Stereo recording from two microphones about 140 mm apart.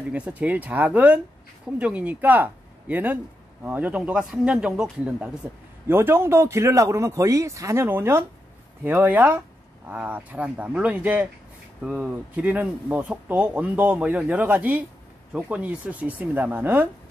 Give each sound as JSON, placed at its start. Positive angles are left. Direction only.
{"t": 0.1, "sound": "speech", "side_deg": -10}